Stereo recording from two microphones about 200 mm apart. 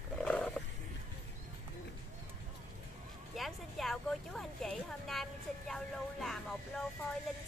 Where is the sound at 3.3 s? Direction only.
Centre (ahead or behind).